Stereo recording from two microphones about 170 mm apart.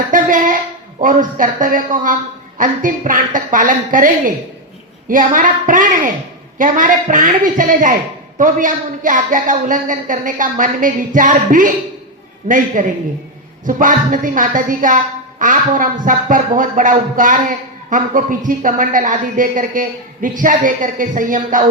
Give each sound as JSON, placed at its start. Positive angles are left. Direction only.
{"t": 0.1, "sound": "a man's voice", "side_deg": -50}